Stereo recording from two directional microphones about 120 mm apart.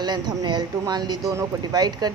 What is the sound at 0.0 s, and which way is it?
A woman's voice, 35° right (ahead or behind).